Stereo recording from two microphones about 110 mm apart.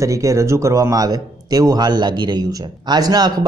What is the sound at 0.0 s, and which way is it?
Speech, 30° right (ahead or behind).